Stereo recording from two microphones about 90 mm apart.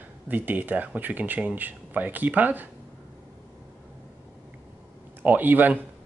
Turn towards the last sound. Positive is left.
turn(degrees=-20)  # may be behind; listen again after turning